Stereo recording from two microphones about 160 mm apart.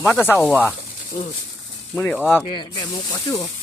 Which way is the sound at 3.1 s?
25° left (ahead or behind).